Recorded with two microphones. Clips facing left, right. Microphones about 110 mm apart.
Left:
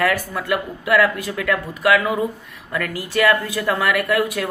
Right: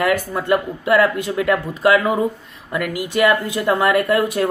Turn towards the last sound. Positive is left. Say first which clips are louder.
# right 3 dB
turn(degrees=-25)  # may be behind; listen again after turning